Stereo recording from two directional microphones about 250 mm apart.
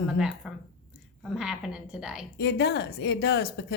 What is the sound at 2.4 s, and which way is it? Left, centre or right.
Speech, left.